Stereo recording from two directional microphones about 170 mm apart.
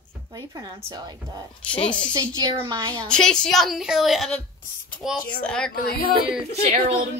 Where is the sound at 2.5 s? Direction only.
25° right (ahead or behind).